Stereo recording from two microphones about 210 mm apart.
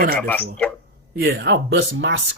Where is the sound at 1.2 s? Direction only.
50° right (ahead or behind).